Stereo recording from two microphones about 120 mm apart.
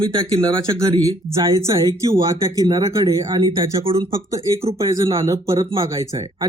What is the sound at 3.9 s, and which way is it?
Speech, 50° right (ahead or behind).